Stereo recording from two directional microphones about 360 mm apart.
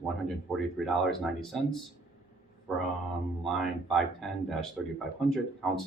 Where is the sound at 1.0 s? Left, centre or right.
Centre.